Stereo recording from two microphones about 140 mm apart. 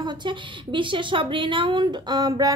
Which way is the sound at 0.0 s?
35° right (ahead or behind).